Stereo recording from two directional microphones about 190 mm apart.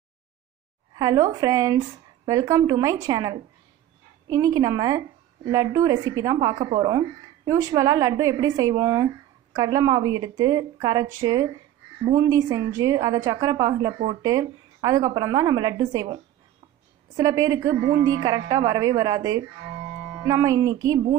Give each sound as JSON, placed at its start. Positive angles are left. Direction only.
{"t": 0.9, "sound": "a woman's voice", "side_deg": -20}
{"t": 17.2, "sound": "a woman's voice", "side_deg": -20}